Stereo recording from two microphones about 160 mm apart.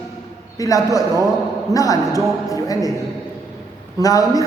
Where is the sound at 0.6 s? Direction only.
20° left (ahead or behind).